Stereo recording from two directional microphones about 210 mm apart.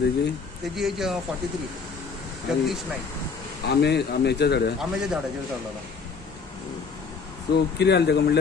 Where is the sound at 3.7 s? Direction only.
50° left (ahead or behind).